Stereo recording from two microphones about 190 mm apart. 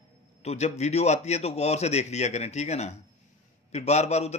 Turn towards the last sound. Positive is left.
turn(degrees=35)  # may be behind; listen again after turning